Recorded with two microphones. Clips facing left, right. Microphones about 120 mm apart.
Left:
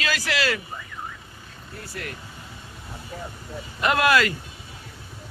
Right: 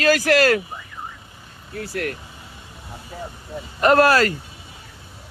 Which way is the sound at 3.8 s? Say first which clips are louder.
Right 5 dB; 40° right (ahead or behind).